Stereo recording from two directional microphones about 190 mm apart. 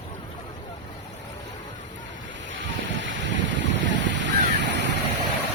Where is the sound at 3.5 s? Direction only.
70° right (ahead or behind).